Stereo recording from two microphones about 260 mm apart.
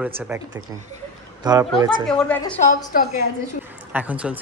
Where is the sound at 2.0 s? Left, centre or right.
Centre.